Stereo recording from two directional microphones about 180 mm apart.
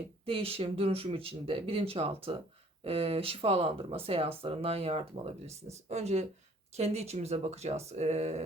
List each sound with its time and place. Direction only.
0.3 s speech: 30° right (ahead or behind)